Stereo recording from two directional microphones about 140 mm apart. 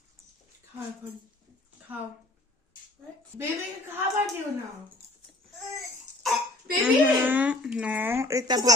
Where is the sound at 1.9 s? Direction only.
10° right (ahead or behind).